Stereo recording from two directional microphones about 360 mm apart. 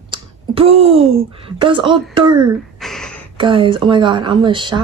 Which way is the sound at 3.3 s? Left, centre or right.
Centre.